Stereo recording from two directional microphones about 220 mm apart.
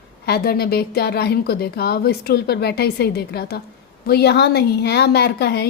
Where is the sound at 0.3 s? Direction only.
45° left (ahead or behind).